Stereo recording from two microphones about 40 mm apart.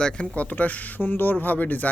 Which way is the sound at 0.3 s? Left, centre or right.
Left.